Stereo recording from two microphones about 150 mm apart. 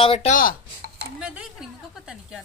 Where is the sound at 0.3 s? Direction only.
70° left (ahead or behind).